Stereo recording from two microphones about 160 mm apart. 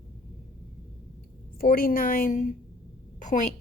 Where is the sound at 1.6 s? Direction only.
65° left (ahead or behind).